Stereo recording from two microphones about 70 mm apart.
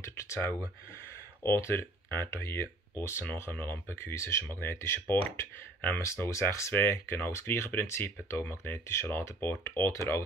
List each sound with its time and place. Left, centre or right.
0.0 s speech: left